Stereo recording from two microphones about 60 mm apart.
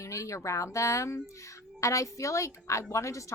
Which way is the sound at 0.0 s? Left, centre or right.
Left.